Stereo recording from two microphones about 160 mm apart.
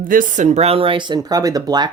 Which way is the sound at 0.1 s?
55° right (ahead or behind).